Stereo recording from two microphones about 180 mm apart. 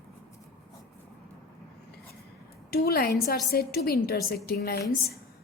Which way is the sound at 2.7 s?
60° left (ahead or behind).